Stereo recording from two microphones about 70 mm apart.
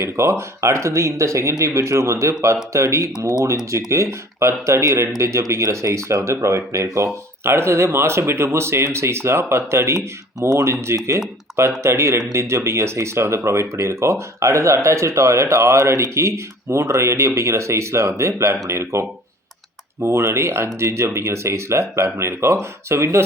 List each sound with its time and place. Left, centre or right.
0.0 s speech: right